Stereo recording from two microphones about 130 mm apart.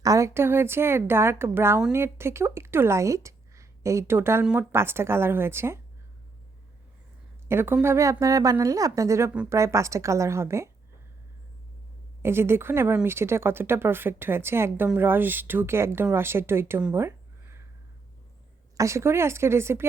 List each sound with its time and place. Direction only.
0.0 s speech: 25° right (ahead or behind)
7.4 s speech: 15° right (ahead or behind)
12.2 s a woman's voice: 20° right (ahead or behind)
16.9 s a sound: 20° right (ahead or behind)
18.8 s speech: 20° right (ahead or behind)